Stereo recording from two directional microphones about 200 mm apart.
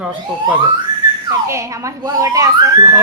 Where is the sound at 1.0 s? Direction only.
20° right (ahead or behind).